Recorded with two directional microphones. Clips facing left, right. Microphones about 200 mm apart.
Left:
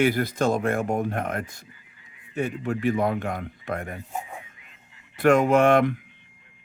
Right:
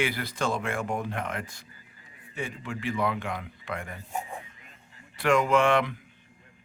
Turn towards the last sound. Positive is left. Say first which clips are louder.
# left 5 dB
turn(degrees=45)  # may be behind; listen again after turning